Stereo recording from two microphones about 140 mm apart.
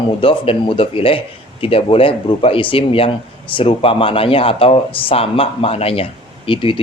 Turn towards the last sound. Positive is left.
turn(degrees=40)  # may be behind; listen again after turning